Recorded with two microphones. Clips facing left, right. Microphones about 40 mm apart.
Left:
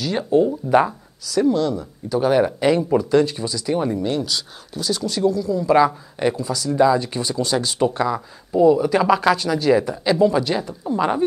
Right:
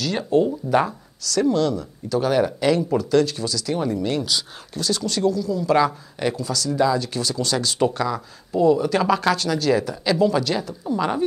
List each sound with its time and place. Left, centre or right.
0.0 s speech: centre